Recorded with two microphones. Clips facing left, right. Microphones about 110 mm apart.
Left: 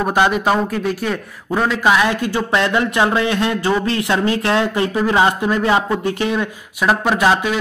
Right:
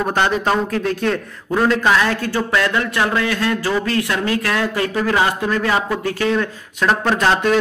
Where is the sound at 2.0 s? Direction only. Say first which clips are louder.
Left 1 dB; 15° left (ahead or behind).